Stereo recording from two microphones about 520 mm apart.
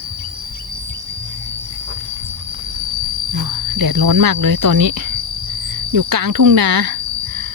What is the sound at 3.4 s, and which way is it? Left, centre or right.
Speech, right.